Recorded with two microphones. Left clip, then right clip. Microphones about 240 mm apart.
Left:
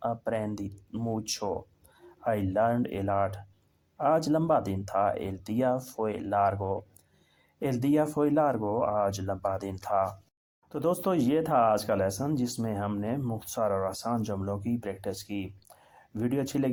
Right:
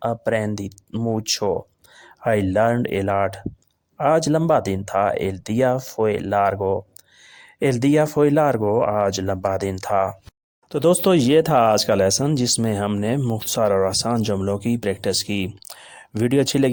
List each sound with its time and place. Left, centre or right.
0.0 s speech: right